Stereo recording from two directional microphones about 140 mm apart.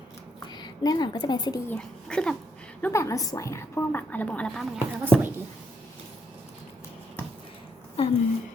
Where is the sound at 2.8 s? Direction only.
20° left (ahead or behind); by 5.3 s 5° left (ahead or behind).